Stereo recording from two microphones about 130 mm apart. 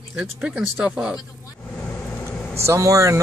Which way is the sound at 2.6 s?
25° right (ahead or behind).